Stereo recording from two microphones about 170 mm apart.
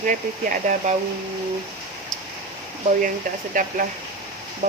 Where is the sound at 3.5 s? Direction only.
50° right (ahead or behind).